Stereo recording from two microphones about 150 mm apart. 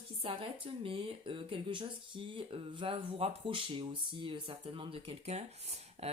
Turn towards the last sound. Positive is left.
turn(degrees=-45)  # may be behind; listen again after turning